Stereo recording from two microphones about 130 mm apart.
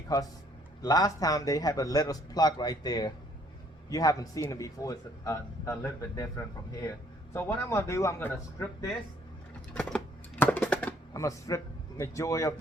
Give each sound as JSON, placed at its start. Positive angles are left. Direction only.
{"t": 0.1, "sound": "a man's voice", "side_deg": 30}
{"t": 10.4, "sound": "a sound", "side_deg": 10}
{"t": 11.1, "sound": "a man's voice", "side_deg": 25}